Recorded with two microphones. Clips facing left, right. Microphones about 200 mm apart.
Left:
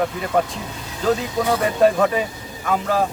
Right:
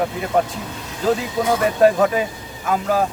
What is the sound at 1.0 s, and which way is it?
A man's voice, 5° right (ahead or behind).